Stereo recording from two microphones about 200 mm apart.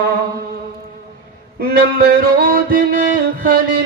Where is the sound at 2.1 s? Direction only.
50° right (ahead or behind).